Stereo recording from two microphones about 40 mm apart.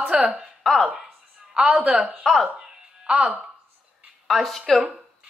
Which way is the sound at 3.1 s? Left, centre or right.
Right.